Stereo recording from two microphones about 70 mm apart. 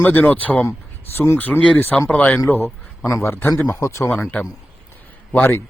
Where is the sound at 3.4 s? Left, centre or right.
Left.